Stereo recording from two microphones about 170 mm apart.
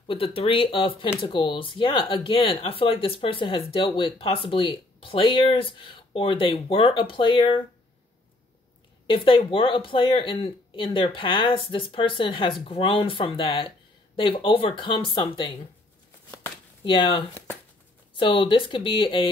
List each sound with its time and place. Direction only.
0.0 s speech: 30° left (ahead or behind)
9.0 s speech: 30° left (ahead or behind)
16.8 s speech: 30° left (ahead or behind)